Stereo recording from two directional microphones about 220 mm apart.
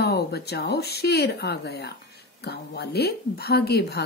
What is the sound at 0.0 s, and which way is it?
Speech, 45° left (ahead or behind).